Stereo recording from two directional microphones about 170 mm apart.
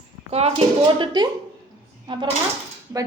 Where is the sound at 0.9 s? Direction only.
25° right (ahead or behind).